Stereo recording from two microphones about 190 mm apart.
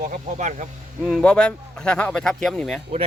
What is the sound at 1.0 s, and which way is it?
Speech, 5° left (ahead or behind).